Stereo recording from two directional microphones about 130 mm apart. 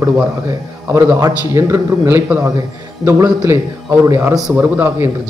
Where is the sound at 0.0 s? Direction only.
25° right (ahead or behind).